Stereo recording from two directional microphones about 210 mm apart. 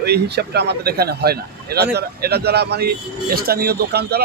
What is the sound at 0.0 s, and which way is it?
Speech, 50° right (ahead or behind).